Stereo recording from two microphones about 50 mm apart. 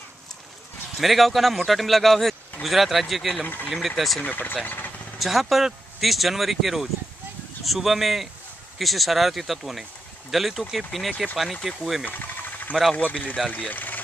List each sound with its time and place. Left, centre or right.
0.9 s speech: centre
4.2 s speech: left
4.6 s vehicle: left
5.2 s speech: centre
12.0 s engine: left
12.9 s speech: left